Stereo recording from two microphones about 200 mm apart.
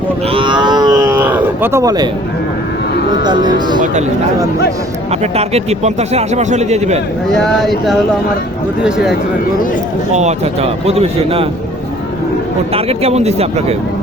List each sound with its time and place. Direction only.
0.3 s livestock: 25° right (ahead or behind)
1.1 s cattle: 10° right (ahead or behind)
3.1 s speech: 20° right (ahead or behind)
5.2 s a man's voice: 30° right (ahead or behind)
7.3 s speech: centre (ahead or behind)
10.2 s a man's voice: 35° right (ahead or behind)
12.7 s a man's voice: 30° right (ahead or behind)